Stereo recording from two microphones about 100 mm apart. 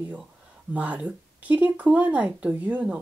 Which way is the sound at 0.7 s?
15° right (ahead or behind).